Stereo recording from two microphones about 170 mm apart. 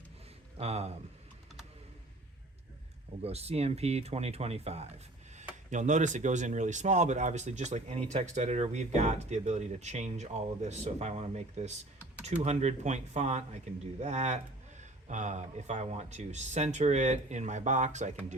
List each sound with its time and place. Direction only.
0.5 s speech: 35° right (ahead or behind)
3.2 s speech: 35° right (ahead or behind)